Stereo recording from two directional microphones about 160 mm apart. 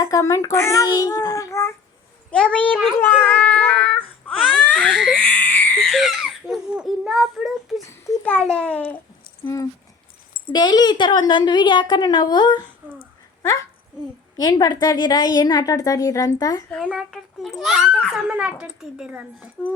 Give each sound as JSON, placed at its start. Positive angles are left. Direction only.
{"t": 0.0, "sound": "a child's voice", "side_deg": 20}
{"t": 2.3, "sound": "a child's voice", "side_deg": 5}
{"t": 3.0, "sound": "baby cry", "side_deg": 10}
{"t": 7.8, "sound": "baby cry", "side_deg": 20}
{"t": 8.2, "sound": "a child's voice", "side_deg": 5}
{"t": 10.5, "sound": "a woman's voice", "side_deg": 25}
{"t": 14.3, "sound": "a woman's voice", "side_deg": 25}
{"t": 16.8, "sound": "a child's voice", "side_deg": -5}